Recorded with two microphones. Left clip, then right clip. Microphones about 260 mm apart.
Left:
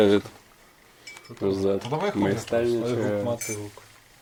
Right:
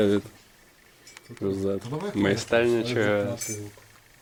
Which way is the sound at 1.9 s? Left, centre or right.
Left.